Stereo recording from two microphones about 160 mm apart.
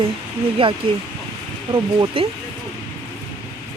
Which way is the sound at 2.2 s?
35° right (ahead or behind).